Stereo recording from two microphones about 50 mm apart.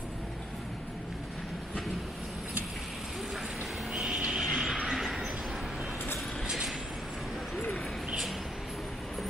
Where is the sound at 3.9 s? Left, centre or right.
Centre.